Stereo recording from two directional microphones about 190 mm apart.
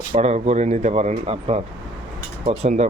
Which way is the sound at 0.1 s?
35° right (ahead or behind).